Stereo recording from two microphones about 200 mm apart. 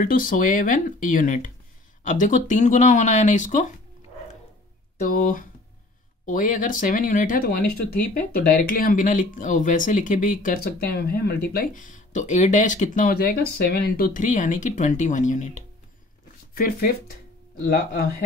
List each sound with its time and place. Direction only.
0.0 s speech: 45° left (ahead or behind)
5.0 s speech: 45° left (ahead or behind)